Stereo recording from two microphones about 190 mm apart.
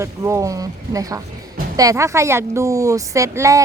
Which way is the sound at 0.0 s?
15° right (ahead or behind).